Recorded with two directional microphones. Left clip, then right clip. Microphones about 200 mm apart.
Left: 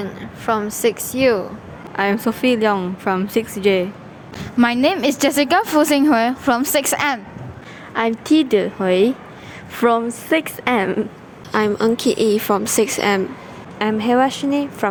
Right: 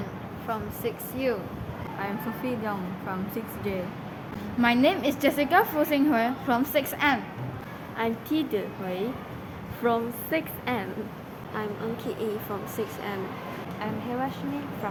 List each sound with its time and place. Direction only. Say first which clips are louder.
0.4 s a woman's voice: left 14 dB; 45° left (ahead or behind)